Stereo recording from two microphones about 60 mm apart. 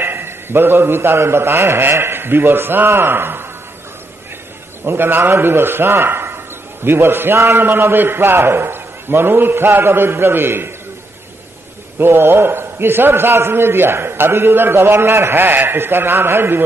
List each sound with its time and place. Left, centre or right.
0.0 s a man's voice: right
4.8 s a man's voice: right
12.0 s a man's voice: right